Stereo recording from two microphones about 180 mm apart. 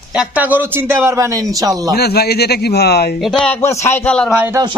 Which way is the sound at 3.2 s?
Centre (ahead or behind).